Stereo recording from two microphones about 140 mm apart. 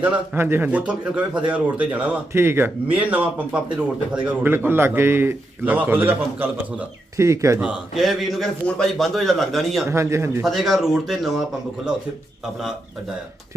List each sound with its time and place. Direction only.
0.0 s a man's voice: 15° right (ahead or behind)
7.6 s a man's voice: 5° right (ahead or behind)
9.9 s speech: 20° right (ahead or behind)
10.4 s a man's voice: centre (ahead or behind)